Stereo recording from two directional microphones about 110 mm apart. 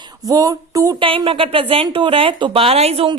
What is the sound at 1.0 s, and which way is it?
A woman's voice, 55° right (ahead or behind).